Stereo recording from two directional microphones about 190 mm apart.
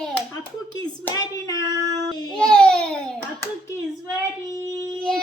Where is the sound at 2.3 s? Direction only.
5° left (ahead or behind).